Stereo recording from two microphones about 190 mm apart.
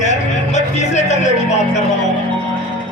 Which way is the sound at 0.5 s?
40° left (ahead or behind).